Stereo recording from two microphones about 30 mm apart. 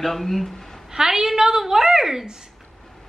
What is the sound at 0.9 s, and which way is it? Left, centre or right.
A woman's voice, centre.